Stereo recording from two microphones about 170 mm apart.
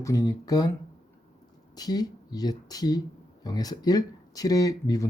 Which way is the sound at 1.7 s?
25° left (ahead or behind).